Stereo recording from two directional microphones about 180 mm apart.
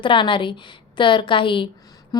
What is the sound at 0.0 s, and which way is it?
A woman's voice, 25° left (ahead or behind).